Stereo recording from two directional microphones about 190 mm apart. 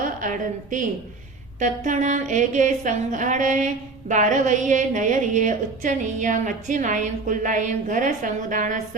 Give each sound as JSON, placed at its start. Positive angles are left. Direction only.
{"t": 0.0, "sound": "a woman's voice", "side_deg": -45}
{"t": 1.5, "sound": "music", "side_deg": -40}